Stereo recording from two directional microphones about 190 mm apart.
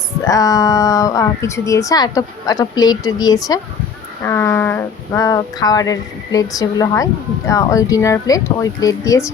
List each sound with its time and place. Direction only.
0.3 s speech: 20° left (ahead or behind)